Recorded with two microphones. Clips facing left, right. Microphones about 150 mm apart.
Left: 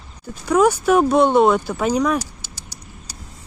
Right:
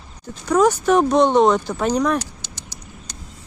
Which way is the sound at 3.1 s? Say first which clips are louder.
Left 1 dB; 10° left (ahead or behind).